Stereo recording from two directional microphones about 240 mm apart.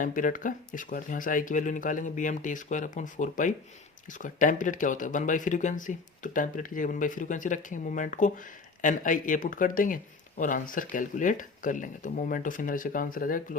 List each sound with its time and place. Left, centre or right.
0.0 s speech: left